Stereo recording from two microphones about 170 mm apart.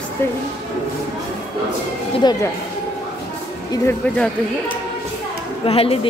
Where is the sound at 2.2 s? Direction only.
25° left (ahead or behind).